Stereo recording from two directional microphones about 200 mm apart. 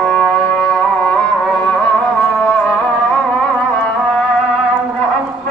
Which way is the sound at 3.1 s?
5° left (ahead or behind).